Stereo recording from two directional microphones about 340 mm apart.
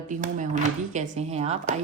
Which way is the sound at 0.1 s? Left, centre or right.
Right.